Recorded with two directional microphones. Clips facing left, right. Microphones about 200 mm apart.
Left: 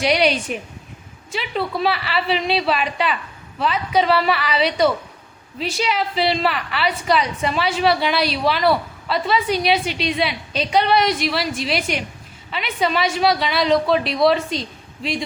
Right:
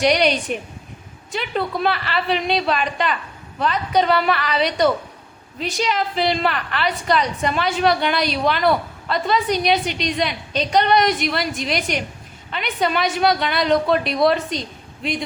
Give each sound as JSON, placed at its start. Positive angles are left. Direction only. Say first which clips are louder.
{"t": 0.0, "sound": "a woman's voice", "louder": "right 1 dB", "side_deg": 0}